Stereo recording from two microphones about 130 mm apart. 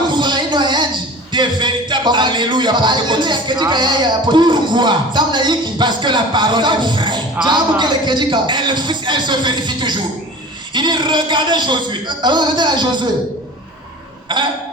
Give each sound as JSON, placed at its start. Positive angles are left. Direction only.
{"t": 0.1, "sound": "a sound", "side_deg": -35}
{"t": 1.3, "sound": "speech", "side_deg": -35}
{"t": 14.3, "sound": "speech", "side_deg": -35}